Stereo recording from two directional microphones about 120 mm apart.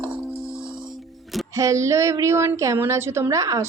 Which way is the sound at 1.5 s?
25° right (ahead or behind).